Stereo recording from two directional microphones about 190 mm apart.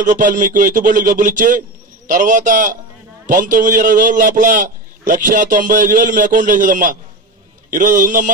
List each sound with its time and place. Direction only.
0.0 s a man's voice: 45° right (ahead or behind)